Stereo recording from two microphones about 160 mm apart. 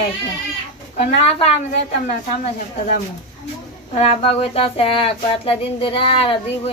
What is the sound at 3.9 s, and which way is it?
Speech, 40° left (ahead or behind).